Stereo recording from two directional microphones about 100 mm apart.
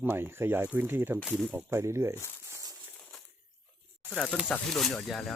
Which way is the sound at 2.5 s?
35° right (ahead or behind).